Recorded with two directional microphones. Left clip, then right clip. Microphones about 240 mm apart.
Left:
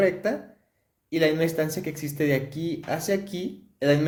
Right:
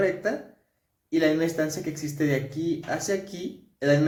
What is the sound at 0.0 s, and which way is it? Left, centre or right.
Speech, left.